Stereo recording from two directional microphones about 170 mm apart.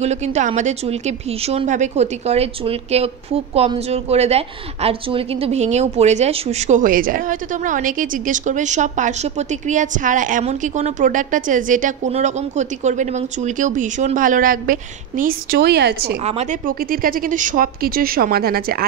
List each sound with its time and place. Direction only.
0.0 s a woman's voice: 40° right (ahead or behind); by 16.2 s 70° right (ahead or behind)
16.3 s speech: 40° right (ahead or behind)
16.6 s a woman's voice: 55° right (ahead or behind)